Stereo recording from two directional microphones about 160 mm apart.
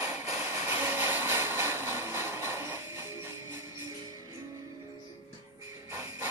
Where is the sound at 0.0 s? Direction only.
15° right (ahead or behind).